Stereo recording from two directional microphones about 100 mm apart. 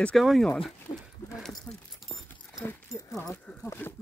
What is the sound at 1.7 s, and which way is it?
Speech, 15° left (ahead or behind).